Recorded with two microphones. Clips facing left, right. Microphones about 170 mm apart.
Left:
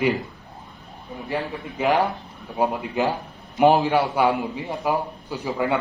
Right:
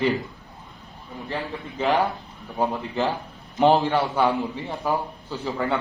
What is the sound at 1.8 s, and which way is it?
A man's voice, 15° left (ahead or behind).